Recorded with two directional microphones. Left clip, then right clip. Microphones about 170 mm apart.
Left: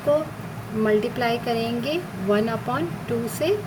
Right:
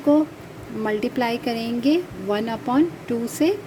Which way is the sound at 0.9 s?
45° right (ahead or behind).